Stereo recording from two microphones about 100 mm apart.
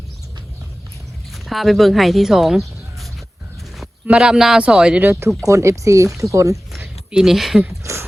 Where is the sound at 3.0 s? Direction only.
Centre (ahead or behind).